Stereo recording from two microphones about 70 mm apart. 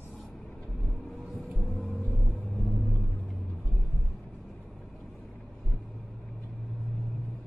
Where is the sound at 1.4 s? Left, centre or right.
Centre.